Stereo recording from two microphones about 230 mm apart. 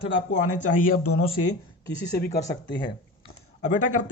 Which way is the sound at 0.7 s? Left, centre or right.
Left.